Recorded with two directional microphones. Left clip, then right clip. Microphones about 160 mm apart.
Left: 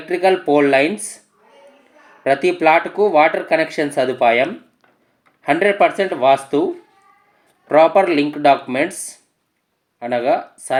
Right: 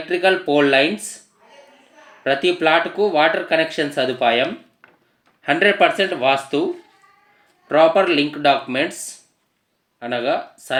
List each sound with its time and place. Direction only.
0.1 s speech: 35° left (ahead or behind)
2.2 s speech: 35° left (ahead or behind)
7.7 s speech: 35° left (ahead or behind)